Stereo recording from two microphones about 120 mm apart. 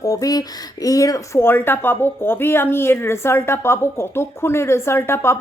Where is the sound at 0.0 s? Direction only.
30° left (ahead or behind).